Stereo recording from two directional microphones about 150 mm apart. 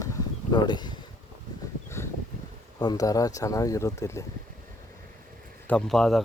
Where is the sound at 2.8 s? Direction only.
25° left (ahead or behind).